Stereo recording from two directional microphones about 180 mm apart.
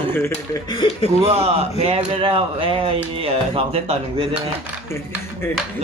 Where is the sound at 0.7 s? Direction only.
25° left (ahead or behind).